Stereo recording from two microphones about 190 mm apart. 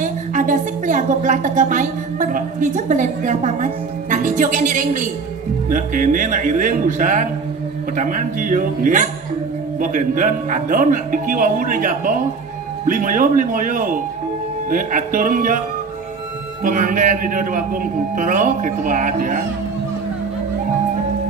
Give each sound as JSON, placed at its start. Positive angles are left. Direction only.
{"t": 0.0, "sound": "speech", "side_deg": -45}
{"t": 16.6, "sound": "speech", "side_deg": -45}